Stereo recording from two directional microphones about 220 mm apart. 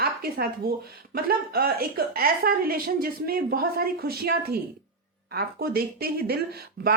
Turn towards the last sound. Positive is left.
turn(degrees=-45)  # may be behind; listen again after turning